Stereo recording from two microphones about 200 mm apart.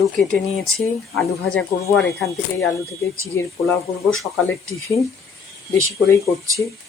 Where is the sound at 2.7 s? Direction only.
15° left (ahead or behind).